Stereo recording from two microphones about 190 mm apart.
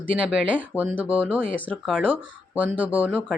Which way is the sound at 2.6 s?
5° right (ahead or behind).